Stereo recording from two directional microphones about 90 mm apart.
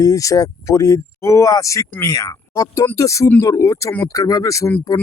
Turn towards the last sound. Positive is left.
turn(degrees=40)  # may be behind; listen again after turning